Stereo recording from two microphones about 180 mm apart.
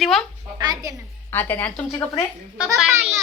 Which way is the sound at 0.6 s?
20° right (ahead or behind).